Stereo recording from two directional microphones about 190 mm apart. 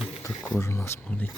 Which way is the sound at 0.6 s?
15° left (ahead or behind).